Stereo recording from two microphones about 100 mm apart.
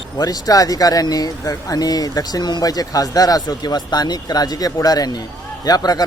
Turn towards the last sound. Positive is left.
turn(degrees=40)  # may be behind; listen again after turning